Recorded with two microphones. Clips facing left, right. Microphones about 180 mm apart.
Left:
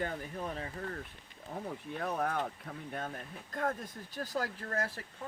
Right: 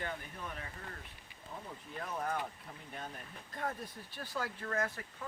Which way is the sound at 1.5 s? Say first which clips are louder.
Left 6 dB; 70° left (ahead or behind).